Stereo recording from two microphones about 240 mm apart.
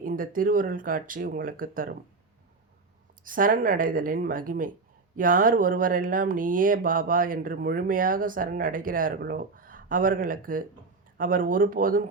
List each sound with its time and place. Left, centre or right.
0.0 s speech: right
3.2 s speech: right